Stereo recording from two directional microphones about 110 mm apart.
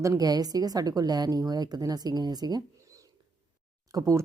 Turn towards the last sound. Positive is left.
turn(degrees=-30)  # may be behind; listen again after turning